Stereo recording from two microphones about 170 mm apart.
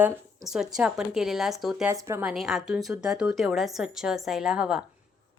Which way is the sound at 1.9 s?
15° right (ahead or behind).